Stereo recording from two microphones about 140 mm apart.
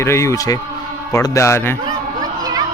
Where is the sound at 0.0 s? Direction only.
20° left (ahead or behind).